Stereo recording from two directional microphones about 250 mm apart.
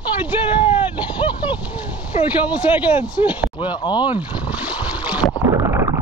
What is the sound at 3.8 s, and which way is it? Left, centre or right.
Speech, centre.